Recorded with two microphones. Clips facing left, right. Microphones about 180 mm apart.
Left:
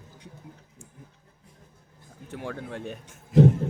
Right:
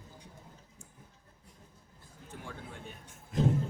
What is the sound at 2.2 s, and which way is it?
A man's voice, 75° left (ahead or behind).